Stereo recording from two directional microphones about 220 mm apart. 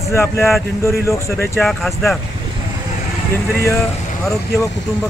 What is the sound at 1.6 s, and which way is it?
Speech, centre (ahead or behind).